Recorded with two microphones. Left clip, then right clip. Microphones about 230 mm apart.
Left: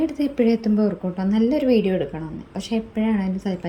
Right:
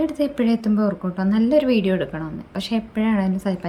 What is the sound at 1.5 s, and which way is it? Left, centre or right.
A woman's voice, right.